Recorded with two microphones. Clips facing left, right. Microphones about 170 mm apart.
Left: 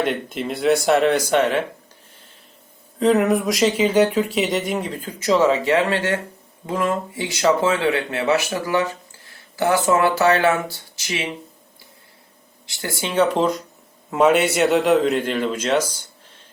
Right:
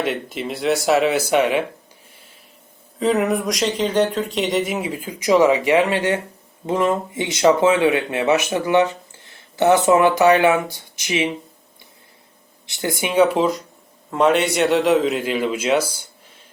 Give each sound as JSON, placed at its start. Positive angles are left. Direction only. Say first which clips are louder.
{"t": 0.0, "sound": "speech", "louder": "left 1 dB", "side_deg": 0}
{"t": 3.0, "sound": "speech", "louder": "left 2 dB", "side_deg": 0}
{"t": 12.6, "sound": "speech", "louder": "right 4 dB", "side_deg": -20}